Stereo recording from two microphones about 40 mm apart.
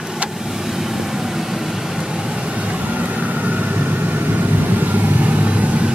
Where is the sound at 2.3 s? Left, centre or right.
Right.